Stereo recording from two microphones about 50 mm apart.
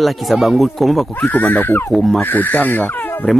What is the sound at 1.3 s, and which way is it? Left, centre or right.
Speech, left.